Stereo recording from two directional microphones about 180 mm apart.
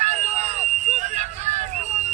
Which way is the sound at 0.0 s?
40° right (ahead or behind).